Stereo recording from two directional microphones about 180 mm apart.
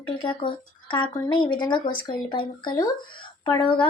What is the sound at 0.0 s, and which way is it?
Speech, 30° left (ahead or behind).